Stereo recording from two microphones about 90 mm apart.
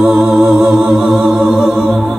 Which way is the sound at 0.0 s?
10° right (ahead or behind).